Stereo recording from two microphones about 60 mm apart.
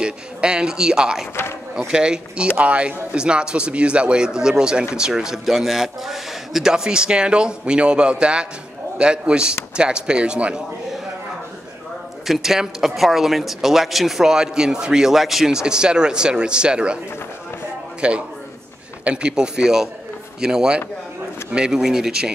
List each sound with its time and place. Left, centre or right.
0.0 s speech: centre
12.3 s speech: centre
18.0 s speech: centre